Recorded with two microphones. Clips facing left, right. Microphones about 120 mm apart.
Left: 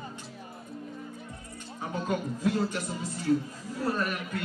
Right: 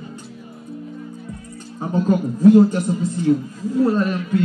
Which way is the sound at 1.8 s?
35° right (ahead or behind).